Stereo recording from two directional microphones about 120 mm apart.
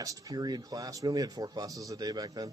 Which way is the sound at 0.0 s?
30° right (ahead or behind).